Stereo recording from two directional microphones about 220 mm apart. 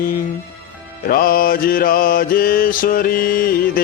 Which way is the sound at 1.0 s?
40° left (ahead or behind).